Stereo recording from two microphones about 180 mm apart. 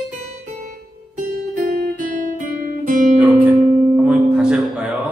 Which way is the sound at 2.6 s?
50° right (ahead or behind).